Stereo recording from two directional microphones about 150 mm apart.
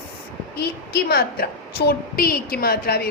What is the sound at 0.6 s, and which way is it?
A woman's voice, 90° left.